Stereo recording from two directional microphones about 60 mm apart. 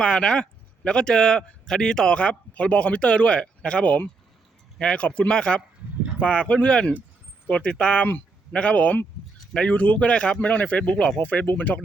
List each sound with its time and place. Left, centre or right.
0.0 s speech: centre